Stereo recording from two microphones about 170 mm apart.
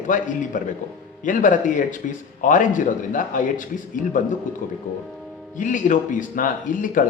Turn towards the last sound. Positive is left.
turn(degrees=50)  # may be behind; listen again after turning